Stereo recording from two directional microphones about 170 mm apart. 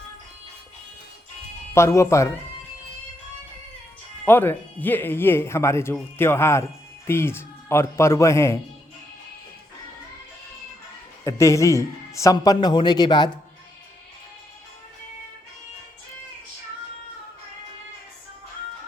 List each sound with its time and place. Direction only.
1.7 s speech: 15° left (ahead or behind)
4.3 s speech: 10° left (ahead or behind)
11.2 s speech: 15° left (ahead or behind)